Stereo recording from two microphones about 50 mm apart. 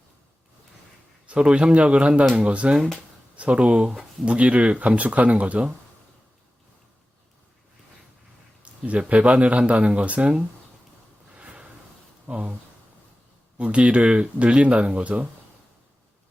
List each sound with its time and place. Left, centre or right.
1.3 s speech: right
8.6 s speech: right
11.3 s a sound: right
12.2 s speech: right
13.6 s speech: right